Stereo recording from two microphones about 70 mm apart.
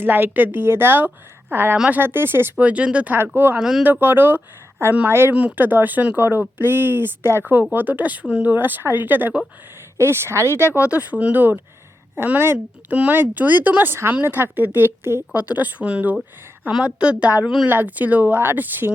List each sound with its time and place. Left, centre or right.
0.0 s a woman's voice: right
2.6 s a woman's voice: centre
3.3 s speech: right
3.6 s a woman's voice: centre
4.0 s a woman's voice: right
5.3 s a woman's voice: centre
5.5 s a woman's voice: right
10.8 s a woman's voice: centre
17.4 s a woman's voice: centre
17.7 s a woman's voice: right